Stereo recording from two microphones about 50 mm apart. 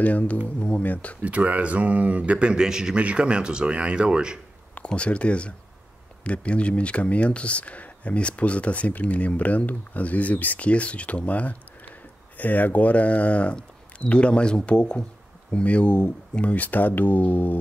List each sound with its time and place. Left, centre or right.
0.0 s speech: left
1.2 s speech: right; by 3.0 s centre
3.0 s speech: right
4.8 s speech: left